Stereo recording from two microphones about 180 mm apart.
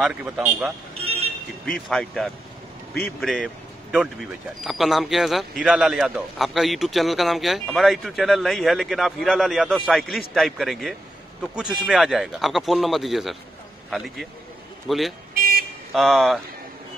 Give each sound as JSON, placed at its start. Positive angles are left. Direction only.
{"t": 0.0, "sound": "a man's voice", "side_deg": -10}
{"t": 1.0, "sound": "vehicle", "side_deg": -35}
{"t": 1.7, "sound": "a man's voice", "side_deg": 5}